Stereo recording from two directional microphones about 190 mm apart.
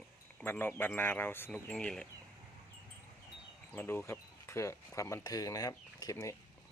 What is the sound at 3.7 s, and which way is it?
Speech, 10° left (ahead or behind).